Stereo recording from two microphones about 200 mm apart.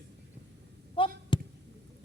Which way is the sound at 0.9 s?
25° left (ahead or behind).